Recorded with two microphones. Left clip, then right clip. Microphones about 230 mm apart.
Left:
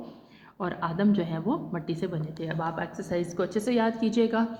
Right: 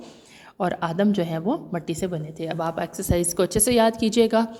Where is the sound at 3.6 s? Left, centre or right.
Right.